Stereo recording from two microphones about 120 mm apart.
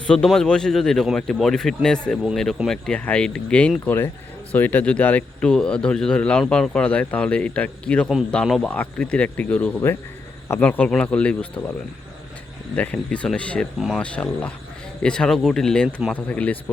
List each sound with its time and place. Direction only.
0.1 s speech: 5° left (ahead or behind)
12.7 s speech: 10° left (ahead or behind)
14.0 s speech: 10° left (ahead or behind)